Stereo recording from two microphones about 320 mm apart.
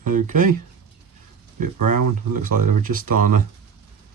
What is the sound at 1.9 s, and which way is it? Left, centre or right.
Speech, right.